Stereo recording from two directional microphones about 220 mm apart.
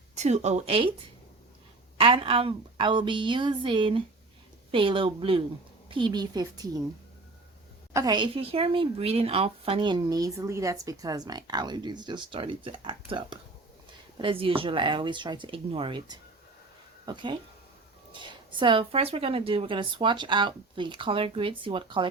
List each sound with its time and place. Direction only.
0.2 s speech: 30° right (ahead or behind)
2.0 s a woman's voice: 25° right (ahead or behind)
7.9 s a woman's voice: 20° right (ahead or behind)